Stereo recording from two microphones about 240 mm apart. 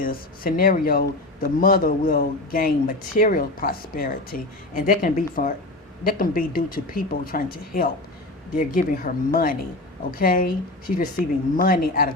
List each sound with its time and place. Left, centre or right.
0.0 s speech: left